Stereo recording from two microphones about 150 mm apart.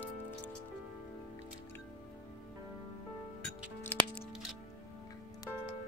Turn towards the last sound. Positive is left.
turn(degrees=10)  # may be behind; listen again after turning